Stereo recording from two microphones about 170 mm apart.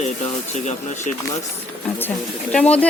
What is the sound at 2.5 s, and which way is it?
Speech, 5° left (ahead or behind).